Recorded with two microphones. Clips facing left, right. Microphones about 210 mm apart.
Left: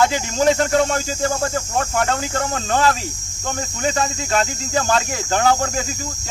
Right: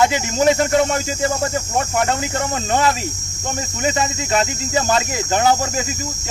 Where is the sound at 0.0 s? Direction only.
10° right (ahead or behind).